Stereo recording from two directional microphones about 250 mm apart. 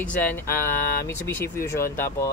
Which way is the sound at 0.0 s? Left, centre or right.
Centre.